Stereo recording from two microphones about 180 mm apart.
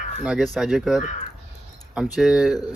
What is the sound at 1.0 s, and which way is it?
Speech, 45° left (ahead or behind).